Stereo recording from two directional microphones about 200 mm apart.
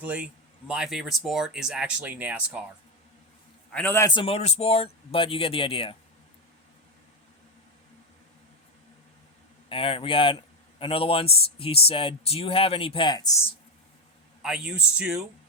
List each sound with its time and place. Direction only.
0.0 s a man's voice: 5° right (ahead or behind)
3.7 s speech: 10° left (ahead or behind); by 6.0 s 25° left (ahead or behind)
9.6 s speech: 25° left (ahead or behind)
14.4 s speech: 5° right (ahead or behind)